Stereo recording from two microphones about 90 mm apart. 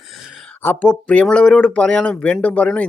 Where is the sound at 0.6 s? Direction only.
25° left (ahead or behind).